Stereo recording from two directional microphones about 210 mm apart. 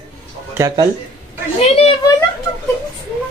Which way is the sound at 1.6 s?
30° left (ahead or behind).